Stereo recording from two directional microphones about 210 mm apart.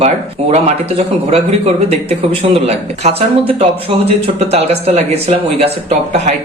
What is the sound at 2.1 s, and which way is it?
Speech, 30° right (ahead or behind).